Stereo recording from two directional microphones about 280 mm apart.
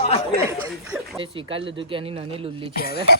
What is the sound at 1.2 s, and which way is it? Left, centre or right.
Speech, centre.